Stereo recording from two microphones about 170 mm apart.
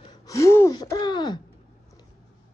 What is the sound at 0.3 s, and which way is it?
Gasp, 15° left (ahead or behind).